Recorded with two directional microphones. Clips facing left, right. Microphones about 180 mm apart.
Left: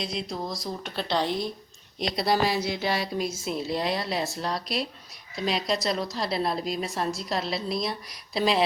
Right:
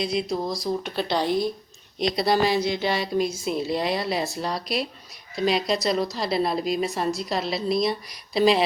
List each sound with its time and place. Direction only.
0.0 s a woman's voice: centre (ahead or behind)